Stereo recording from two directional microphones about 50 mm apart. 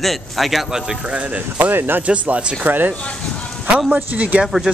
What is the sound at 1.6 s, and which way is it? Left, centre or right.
Speech, right.